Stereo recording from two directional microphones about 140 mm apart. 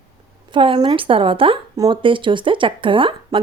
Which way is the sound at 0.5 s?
35° right (ahead or behind).